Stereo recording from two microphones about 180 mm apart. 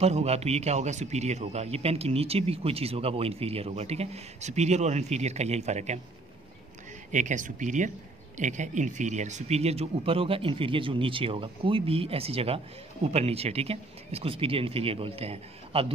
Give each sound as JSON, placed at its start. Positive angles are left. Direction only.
{"t": 0.0, "sound": "speech", "side_deg": -35}
{"t": 7.1, "sound": "speech", "side_deg": -45}